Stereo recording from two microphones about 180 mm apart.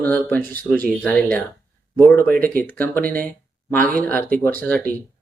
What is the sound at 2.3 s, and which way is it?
Speech, 50° right (ahead or behind).